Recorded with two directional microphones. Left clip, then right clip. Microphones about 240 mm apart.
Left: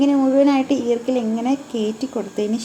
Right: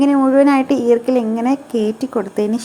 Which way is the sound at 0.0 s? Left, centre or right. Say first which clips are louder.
Right 3 dB; centre.